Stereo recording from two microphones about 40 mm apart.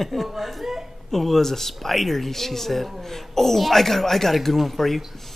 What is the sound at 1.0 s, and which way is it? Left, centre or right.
A child's voice, centre.